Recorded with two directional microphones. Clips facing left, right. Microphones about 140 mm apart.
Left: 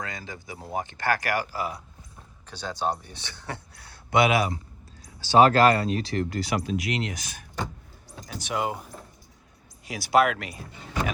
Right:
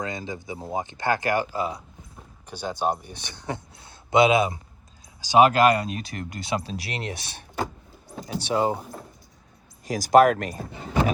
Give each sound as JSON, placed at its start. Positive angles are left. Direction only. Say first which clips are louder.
{"t": 0.0, "sound": "speech", "louder": "right 5 dB", "side_deg": -20}
{"t": 2.5, "sound": "speech", "louder": "right 3 dB", "side_deg": -10}
{"t": 9.8, "sound": "speech", "louder": "right 5 dB", "side_deg": -40}